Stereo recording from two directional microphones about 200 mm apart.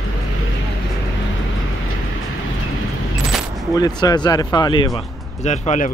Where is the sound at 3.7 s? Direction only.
20° left (ahead or behind).